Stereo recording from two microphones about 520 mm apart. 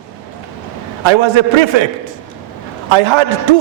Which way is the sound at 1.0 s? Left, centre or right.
Right.